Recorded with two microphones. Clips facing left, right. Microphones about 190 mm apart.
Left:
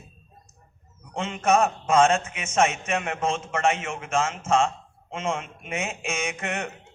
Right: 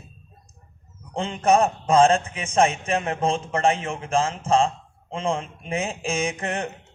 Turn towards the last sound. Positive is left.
turn(degrees=-35)  # may be behind; listen again after turning